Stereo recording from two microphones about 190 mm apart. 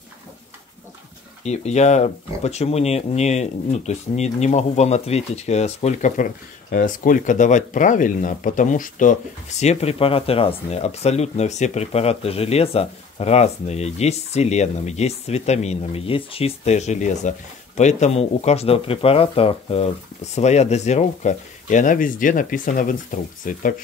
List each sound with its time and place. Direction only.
1.4 s speech: 35° left (ahead or behind)